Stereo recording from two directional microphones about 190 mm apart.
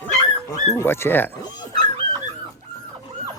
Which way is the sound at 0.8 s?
15° left (ahead or behind).